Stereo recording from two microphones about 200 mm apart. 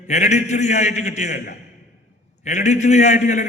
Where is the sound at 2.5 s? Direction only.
35° left (ahead or behind).